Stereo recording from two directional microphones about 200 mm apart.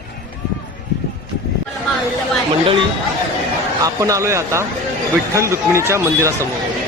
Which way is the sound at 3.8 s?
15° right (ahead or behind).